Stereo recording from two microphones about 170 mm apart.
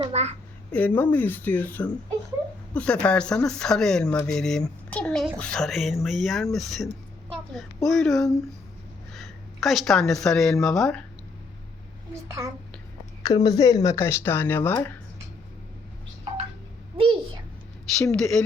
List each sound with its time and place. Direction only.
0.1 s a sound: 40° right (ahead or behind)
0.7 s speech: 10° left (ahead or behind)
7.9 s a woman's voice: centre (ahead or behind)
13.2 s speech: 20° left (ahead or behind)
17.0 s a sound: 30° right (ahead or behind)
17.9 s speech: 5° left (ahead or behind)